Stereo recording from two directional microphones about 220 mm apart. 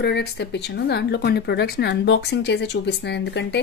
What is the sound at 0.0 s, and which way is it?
Speech, 50° left (ahead or behind).